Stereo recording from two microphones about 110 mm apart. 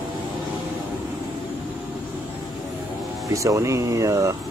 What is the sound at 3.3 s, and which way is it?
Speech, 30° right (ahead or behind).